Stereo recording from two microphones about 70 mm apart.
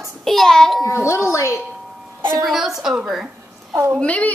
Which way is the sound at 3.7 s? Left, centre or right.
Right.